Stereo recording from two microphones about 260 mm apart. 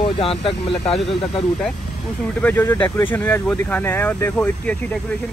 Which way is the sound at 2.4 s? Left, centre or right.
Centre.